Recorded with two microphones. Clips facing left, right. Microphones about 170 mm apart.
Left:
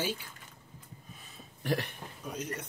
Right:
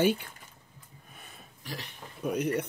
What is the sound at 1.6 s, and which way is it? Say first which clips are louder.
Speech: left 10 dB; 55° left (ahead or behind).